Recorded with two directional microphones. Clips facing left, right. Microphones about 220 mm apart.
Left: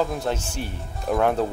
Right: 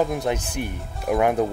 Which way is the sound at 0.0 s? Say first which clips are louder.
Right 2 dB; 15° right (ahead or behind).